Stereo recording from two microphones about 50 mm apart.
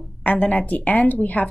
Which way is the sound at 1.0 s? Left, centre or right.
Left.